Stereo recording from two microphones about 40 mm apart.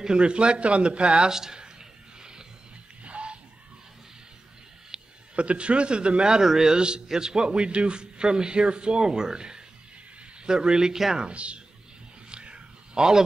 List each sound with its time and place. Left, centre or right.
0.0 s a man's voice: right
3.0 s music: right
4.9 s a sound: centre
5.3 s a man's voice: right
6.4 s a man's voice: centre
11.2 s a man's voice: right
12.3 s a sound: right